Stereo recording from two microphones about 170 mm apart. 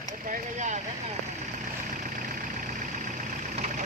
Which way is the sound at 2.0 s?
55° right (ahead or behind).